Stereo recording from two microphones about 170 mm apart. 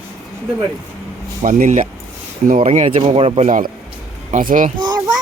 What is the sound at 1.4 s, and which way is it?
Speech, 50° right (ahead or behind).